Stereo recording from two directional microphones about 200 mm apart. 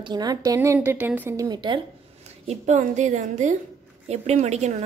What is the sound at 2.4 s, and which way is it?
A woman's voice, 35° right (ahead or behind).